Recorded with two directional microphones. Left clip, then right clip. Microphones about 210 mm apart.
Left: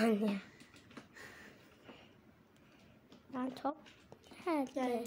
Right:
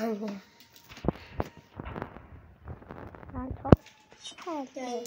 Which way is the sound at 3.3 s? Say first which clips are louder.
Right 14 dB; 10° left (ahead or behind).